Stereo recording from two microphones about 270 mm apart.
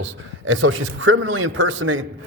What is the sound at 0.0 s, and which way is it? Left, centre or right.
A man's voice, right.